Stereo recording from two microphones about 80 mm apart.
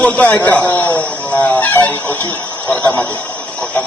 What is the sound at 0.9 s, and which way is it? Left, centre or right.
Chicken, left.